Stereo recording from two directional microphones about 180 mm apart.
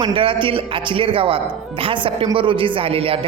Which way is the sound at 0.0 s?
30° right (ahead or behind).